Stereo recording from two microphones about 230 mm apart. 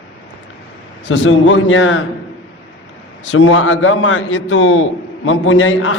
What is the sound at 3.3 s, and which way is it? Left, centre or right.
A man's voice, left.